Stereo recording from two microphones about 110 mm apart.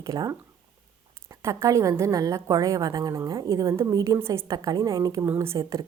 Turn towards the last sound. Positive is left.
turn(degrees=-30)  # may be behind; listen again after turning